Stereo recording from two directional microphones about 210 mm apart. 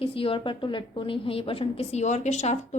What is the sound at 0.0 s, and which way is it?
A woman's voice, 25° left (ahead or behind).